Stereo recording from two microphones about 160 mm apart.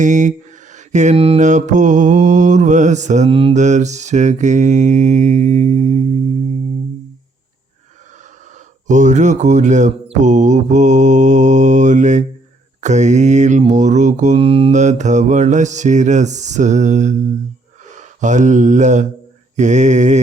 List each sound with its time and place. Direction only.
0.0 s mantra: 50° right (ahead or behind)
8.9 s mantra: 50° right (ahead or behind)
17.9 s a sound: 50° right (ahead or behind)
19.5 s mantra: 50° right (ahead or behind)